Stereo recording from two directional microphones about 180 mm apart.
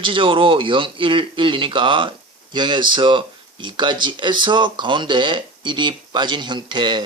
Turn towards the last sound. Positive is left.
turn(degrees=-25)  # may be behind; listen again after turning